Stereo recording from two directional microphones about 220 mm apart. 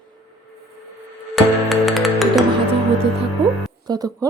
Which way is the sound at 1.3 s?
Centre (ahead or behind).